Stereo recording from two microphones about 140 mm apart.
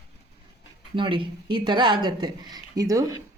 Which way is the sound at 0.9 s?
35° right (ahead or behind).